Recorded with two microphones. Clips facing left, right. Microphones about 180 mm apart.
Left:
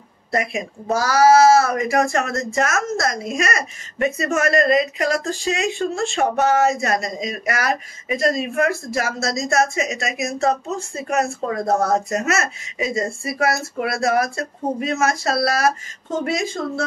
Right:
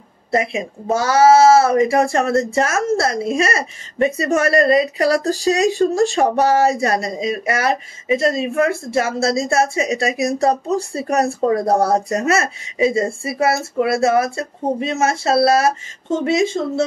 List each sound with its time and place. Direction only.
0.3 s speech: 25° right (ahead or behind)